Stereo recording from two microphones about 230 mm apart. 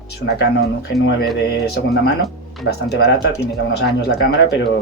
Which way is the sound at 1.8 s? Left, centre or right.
Left.